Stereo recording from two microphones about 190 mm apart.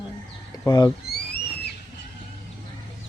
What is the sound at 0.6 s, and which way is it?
Speech, 20° left (ahead or behind).